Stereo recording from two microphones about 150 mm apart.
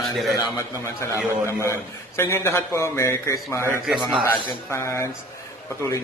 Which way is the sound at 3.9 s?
5° right (ahead or behind).